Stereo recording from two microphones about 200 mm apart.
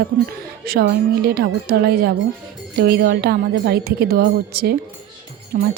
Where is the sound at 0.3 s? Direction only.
50° right (ahead or behind).